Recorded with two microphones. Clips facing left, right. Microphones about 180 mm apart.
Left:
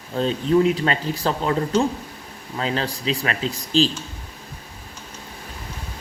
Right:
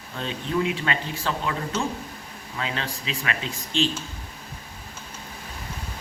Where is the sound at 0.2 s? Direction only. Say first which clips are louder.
Left 8 dB; 35° left (ahead or behind).